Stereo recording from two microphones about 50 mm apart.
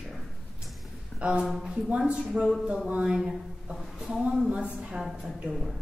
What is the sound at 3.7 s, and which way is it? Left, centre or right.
A woman's voice, centre.